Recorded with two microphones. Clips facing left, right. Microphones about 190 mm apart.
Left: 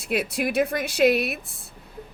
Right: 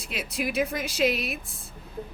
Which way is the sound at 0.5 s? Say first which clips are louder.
Left 5 dB; 65° left (ahead or behind).